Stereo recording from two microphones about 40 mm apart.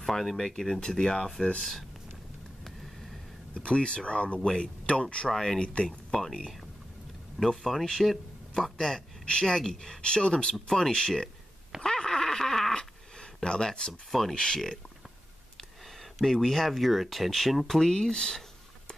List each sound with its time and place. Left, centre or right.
0.0 s a sound: centre
0.4 s speech: centre
1.6 s speech: centre
3.5 s speech: left
5.3 s speech: centre
5.6 s speech: left
5.9 s speech: centre
7.3 s speech: centre
11.8 s a sound: centre
12.7 s a sound: left
14.3 s speech: centre
16.0 s speech: centre